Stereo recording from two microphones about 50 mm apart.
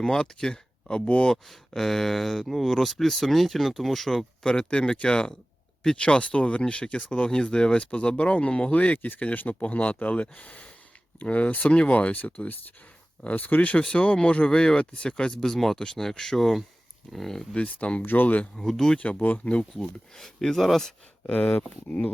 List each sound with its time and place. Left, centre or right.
0.0 s speech: centre
1.5 s speech: centre
4.4 s speech: centre
17.5 s speech: left
18.0 s speech: left
18.5 s speech: centre
18.9 s speech: left
19.7 s speech: centre
21.2 s speech: left